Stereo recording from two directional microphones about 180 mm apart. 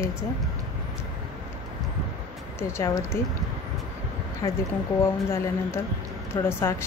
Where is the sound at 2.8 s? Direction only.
15° left (ahead or behind).